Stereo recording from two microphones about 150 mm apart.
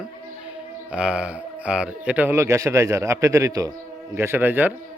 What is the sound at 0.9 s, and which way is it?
Speech, 5° right (ahead or behind).